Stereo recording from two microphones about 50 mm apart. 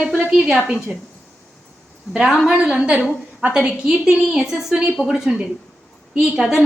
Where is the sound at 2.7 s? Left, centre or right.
Right.